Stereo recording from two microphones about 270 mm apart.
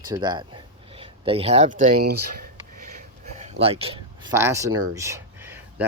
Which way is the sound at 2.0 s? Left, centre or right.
Right.